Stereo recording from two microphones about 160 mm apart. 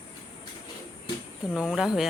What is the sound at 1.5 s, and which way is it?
Speech, centre (ahead or behind).